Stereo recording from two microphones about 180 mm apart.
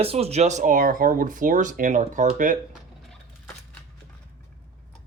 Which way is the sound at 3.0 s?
5° left (ahead or behind).